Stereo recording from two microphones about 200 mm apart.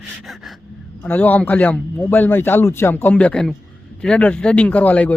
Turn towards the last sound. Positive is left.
turn(degrees=5)  # may be behind; listen again after turning